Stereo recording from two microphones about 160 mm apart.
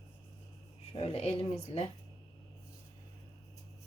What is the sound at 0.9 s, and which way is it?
Speech, 40° left (ahead or behind).